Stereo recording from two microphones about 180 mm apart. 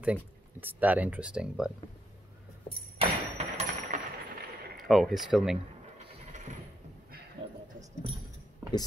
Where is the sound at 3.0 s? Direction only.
35° right (ahead or behind).